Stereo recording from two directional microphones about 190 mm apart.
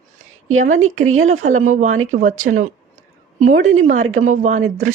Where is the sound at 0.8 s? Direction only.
90° right.